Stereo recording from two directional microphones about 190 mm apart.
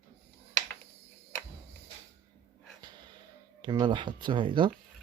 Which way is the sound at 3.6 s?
25° right (ahead or behind).